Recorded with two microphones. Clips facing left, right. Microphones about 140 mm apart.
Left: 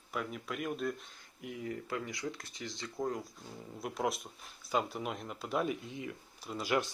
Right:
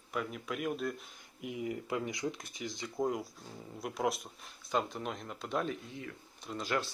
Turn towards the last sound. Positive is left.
turn(degrees=5)  # may be behind; listen again after turning